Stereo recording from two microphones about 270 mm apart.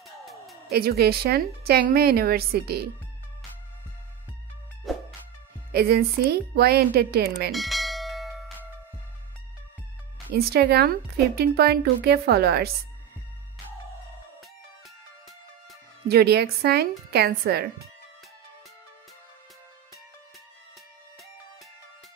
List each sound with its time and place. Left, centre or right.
0.0 s music: centre
0.7 s speech: right
4.9 s music: centre
5.7 s speech: right
7.5 s bell: centre
10.3 s speech: right
16.1 s speech: right